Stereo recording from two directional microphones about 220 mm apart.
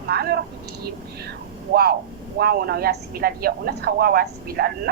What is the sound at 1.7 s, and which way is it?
A woman's voice, 45° right (ahead or behind).